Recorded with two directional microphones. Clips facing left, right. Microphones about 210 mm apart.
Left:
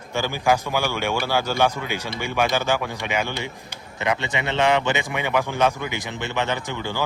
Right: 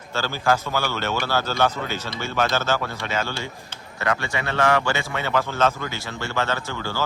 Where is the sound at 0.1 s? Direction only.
15° left (ahead or behind).